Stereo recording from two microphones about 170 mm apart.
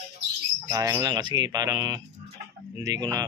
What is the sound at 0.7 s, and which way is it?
Speech, 20° right (ahead or behind).